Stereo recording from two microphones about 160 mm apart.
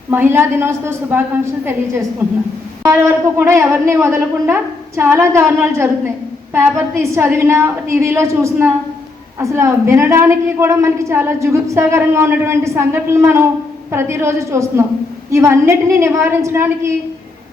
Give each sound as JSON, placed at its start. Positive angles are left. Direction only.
{"t": 0.1, "sound": "a woman's voice", "side_deg": -15}